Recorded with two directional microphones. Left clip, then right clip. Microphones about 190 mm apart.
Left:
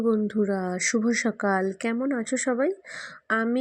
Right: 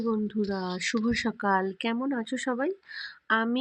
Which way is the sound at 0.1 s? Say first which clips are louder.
Left 4 dB; 25° left (ahead or behind).